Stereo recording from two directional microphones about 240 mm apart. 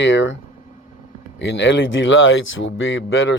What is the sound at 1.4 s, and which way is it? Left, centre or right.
Speech, left.